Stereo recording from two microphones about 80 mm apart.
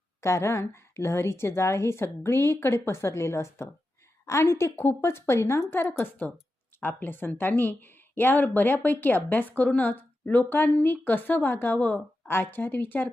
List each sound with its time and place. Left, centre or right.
0.2 s a woman's voice: left